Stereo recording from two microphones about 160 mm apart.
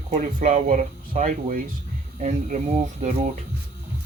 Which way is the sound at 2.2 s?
45° right (ahead or behind).